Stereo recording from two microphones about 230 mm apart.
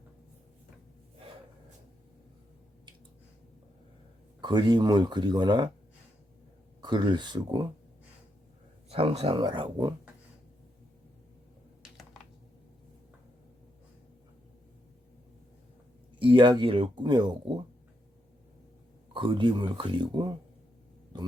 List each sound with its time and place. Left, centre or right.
4.4 s speech: centre
6.8 s speech: centre
8.9 s speech: right
16.1 s speech: right
19.1 s speech: right